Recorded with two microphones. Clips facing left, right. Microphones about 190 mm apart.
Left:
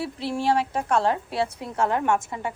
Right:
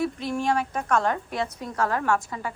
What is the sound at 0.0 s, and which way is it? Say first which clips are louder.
A woman's voice: even; 30° left (ahead or behind).